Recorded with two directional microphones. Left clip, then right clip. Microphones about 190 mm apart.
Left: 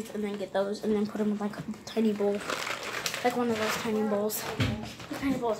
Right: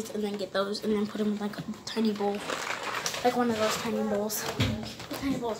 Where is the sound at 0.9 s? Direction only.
5° left (ahead or behind).